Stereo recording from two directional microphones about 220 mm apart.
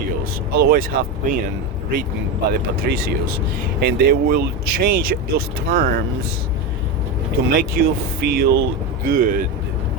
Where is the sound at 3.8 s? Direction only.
40° right (ahead or behind).